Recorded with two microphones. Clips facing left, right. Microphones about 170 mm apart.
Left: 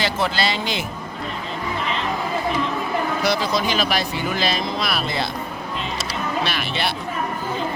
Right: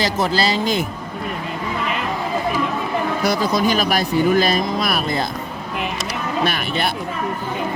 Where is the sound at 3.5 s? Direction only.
45° right (ahead or behind).